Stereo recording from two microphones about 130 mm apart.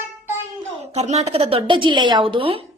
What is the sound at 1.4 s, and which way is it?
A woman's voice, 40° right (ahead or behind).